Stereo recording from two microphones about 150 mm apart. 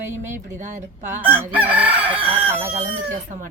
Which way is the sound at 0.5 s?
55° right (ahead or behind).